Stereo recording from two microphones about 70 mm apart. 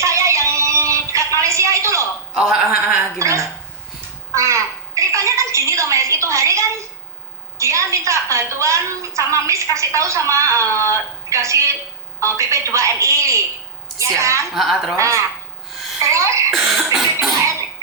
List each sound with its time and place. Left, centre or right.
0.0 s synthetic singing: right
2.4 s cough: centre
3.2 s a woman's voice: right
14.5 s cough: centre
14.9 s a woman's voice: right
16.5 s cough: centre